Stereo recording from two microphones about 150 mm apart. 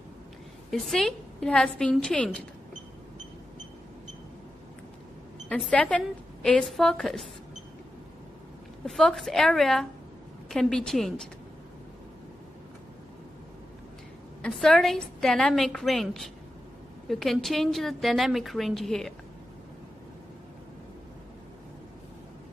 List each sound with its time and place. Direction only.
0.7 s a woman's voice: centre (ahead or behind)
5.5 s a woman's voice: 10° left (ahead or behind)
8.8 s a woman's voice: 5° left (ahead or behind)
14.4 s a woman's voice: 5° left (ahead or behind)